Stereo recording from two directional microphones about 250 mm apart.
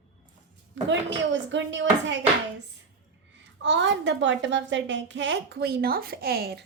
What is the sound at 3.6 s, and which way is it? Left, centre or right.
A woman's voice, right.